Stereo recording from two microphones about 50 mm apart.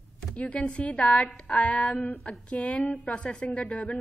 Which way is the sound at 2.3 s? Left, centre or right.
Left.